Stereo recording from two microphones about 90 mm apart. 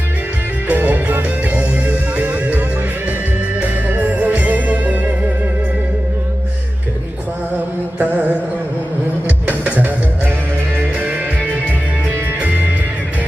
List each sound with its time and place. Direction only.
0.7 s music: 20° right (ahead or behind)
7.9 s carnatic music: 20° right (ahead or behind)
9.5 s music: 20° right (ahead or behind)